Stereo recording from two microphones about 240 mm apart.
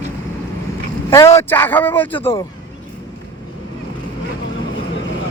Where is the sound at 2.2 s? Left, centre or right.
Left.